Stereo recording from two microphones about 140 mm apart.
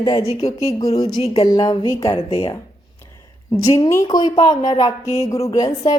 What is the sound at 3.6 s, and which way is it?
A woman's voice, 20° left (ahead or behind).